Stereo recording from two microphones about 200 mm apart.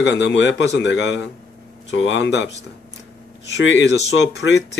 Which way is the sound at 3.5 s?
65° left (ahead or behind).